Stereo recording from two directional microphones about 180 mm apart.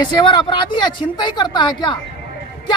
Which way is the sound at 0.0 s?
25° left (ahead or behind).